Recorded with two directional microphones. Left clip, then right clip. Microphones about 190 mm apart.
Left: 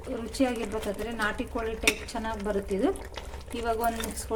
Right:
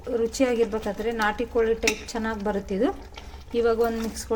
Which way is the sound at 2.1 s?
15° right (ahead or behind).